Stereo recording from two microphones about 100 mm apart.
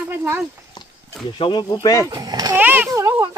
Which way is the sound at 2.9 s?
30° right (ahead or behind).